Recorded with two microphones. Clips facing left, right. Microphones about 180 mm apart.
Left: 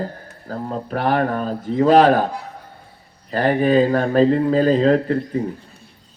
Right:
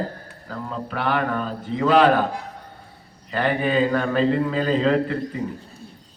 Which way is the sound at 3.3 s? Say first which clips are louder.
Left 5 dB; 40° left (ahead or behind).